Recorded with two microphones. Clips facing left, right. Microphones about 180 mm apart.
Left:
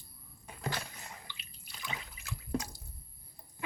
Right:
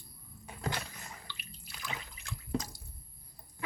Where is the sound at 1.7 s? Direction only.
Centre (ahead or behind).